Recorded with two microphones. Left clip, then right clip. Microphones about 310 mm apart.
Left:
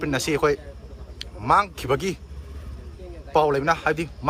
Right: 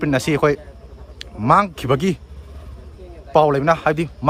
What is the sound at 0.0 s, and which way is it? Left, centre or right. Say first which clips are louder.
A man's voice: right 5 dB; right.